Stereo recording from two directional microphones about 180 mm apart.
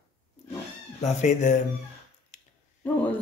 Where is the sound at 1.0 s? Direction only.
40° left (ahead or behind).